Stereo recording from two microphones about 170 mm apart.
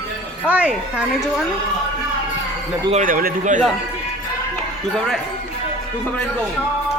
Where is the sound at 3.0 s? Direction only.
50° right (ahead or behind).